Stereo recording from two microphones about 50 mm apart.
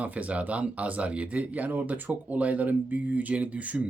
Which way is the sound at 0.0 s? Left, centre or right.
Right.